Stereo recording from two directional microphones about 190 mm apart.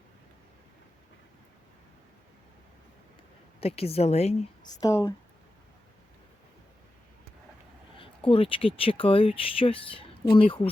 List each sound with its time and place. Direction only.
3.6 s a woman's voice: 30° left (ahead or behind)
4.7 s speech: 15° left (ahead or behind)
8.3 s speech: 30° left (ahead or behind)